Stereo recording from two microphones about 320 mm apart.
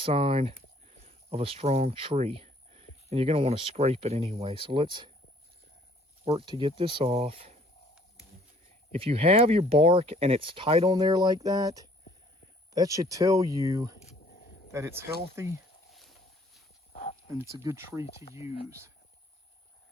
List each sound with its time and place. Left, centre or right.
0.0 s speech: centre
6.2 s speech: centre
8.9 s speech: centre
14.0 s a sound: left
14.7 s speech: centre
15.4 s a sound: centre
16.9 s wild animals: left
17.5 s speech: centre